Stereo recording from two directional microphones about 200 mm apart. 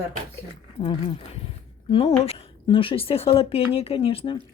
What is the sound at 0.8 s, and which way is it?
Speech, 25° left (ahead or behind).